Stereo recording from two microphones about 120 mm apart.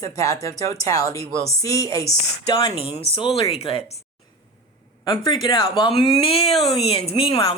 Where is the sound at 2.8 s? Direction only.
50° left (ahead or behind).